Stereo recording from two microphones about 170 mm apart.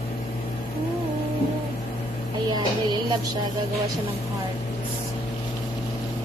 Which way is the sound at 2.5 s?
25° right (ahead or behind).